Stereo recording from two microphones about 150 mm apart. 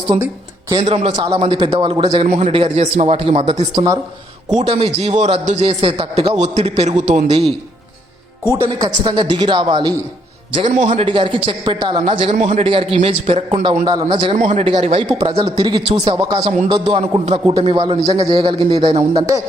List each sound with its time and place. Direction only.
0.7 s a man's voice: 40° right (ahead or behind)
2.2 s a man's voice: 50° right (ahead or behind)
2.5 s a man's voice: 40° right (ahead or behind)
6.3 s a man's voice: 50° right (ahead or behind)
8.8 s speech: 30° right (ahead or behind)
10.8 s a man's voice: 40° right (ahead or behind)
12.0 s a man's voice: 45° right (ahead or behind)
14.3 s a man's voice: 55° right (ahead or behind)
14.6 s a man's voice: 40° right (ahead or behind)